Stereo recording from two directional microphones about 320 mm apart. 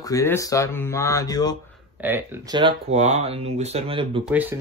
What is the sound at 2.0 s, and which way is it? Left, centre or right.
Speech, centre.